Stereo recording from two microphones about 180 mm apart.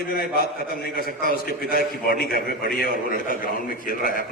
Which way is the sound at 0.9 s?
55° left (ahead or behind).